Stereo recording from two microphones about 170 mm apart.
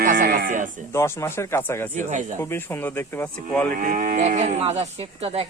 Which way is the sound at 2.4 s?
15° left (ahead or behind).